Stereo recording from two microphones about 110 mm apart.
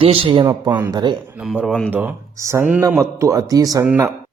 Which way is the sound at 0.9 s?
40° right (ahead or behind).